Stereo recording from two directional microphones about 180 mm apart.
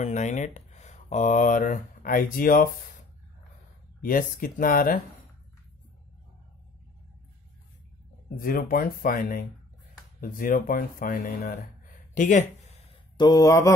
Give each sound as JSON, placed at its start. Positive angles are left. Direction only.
{"t": 0.0, "sound": "speech", "side_deg": 40}
{"t": 4.0, "sound": "speech", "side_deg": 50}
{"t": 8.4, "sound": "speech", "side_deg": 50}
{"t": 12.1, "sound": "speech", "side_deg": 45}
{"t": 13.2, "sound": "speech", "side_deg": 20}